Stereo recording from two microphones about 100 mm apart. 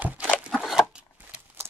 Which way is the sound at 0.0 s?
15° right (ahead or behind).